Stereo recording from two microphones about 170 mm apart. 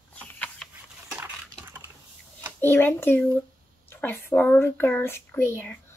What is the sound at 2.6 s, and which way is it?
A child's voice, 15° left (ahead or behind).